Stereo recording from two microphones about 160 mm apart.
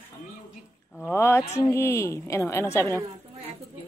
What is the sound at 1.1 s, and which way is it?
A woman's voice, 15° left (ahead or behind).